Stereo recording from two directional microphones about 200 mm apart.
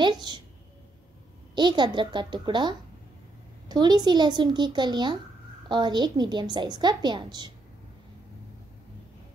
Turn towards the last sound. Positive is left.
turn(degrees=-20)  # may be behind; listen again after turning